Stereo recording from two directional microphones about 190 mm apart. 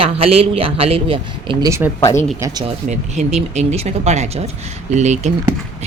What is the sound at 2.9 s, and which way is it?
Speech, 35° right (ahead or behind).